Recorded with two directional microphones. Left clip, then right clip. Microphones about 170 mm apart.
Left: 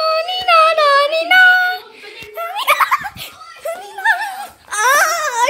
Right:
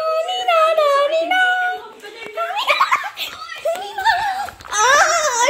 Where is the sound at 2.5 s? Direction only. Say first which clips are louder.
Left 3 dB; 40° left (ahead or behind).